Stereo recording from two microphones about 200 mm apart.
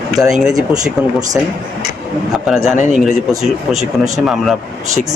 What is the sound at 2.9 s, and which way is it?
Speech, 5° right (ahead or behind).